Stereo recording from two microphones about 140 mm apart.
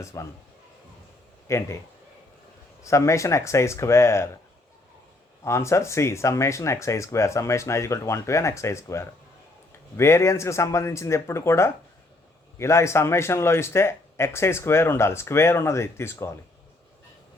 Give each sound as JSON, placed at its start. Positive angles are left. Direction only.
{"t": 0.0, "sound": "speech", "side_deg": 20}
{"t": 1.5, "sound": "speech", "side_deg": 20}
{"t": 2.8, "sound": "speech", "side_deg": 20}
{"t": 5.4, "sound": "speech", "side_deg": 20}